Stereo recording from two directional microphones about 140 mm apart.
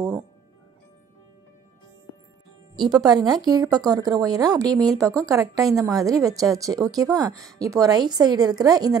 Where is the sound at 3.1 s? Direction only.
30° right (ahead or behind).